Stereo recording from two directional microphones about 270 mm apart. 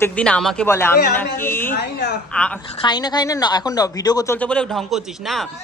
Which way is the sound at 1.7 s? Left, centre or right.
Left.